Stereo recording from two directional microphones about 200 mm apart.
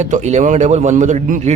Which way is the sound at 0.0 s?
35° right (ahead or behind).